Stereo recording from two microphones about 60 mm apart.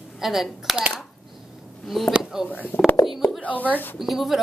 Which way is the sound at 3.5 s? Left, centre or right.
Right.